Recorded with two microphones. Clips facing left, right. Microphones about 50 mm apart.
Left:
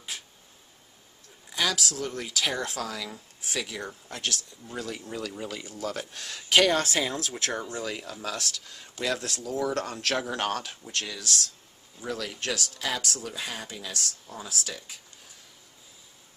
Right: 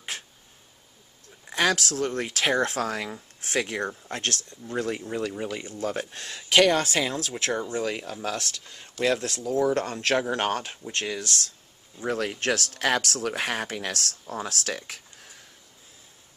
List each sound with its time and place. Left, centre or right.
0.1 s a sound: right
1.5 s speech: right
4.7 s speech: right
5.3 s speech: right
5.6 s speech: right